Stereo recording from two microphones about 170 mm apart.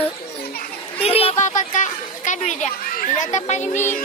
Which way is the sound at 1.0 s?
35° left (ahead or behind).